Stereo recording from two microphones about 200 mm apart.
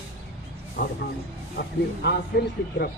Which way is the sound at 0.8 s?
40° left (ahead or behind).